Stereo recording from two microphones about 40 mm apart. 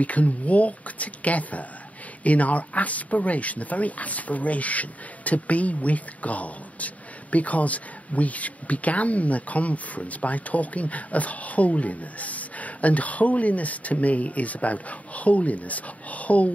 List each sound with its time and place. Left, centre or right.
0.0 s speech: left